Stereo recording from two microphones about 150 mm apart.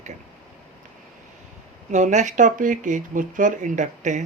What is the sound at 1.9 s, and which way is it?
Speech, 55° right (ahead or behind).